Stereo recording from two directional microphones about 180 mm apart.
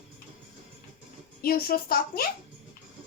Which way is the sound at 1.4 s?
55° left (ahead or behind).